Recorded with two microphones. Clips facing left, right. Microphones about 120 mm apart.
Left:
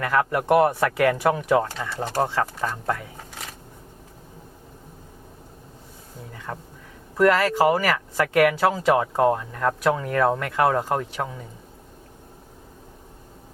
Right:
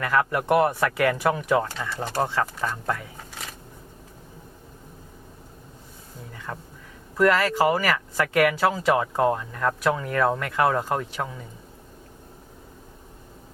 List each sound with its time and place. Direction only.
0.0 s speech: 40° left (ahead or behind)
6.3 s a sound: 35° left (ahead or behind)
7.2 s speech: 45° left (ahead or behind)